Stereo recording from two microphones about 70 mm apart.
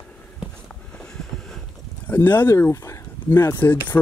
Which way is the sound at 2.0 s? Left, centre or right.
Left.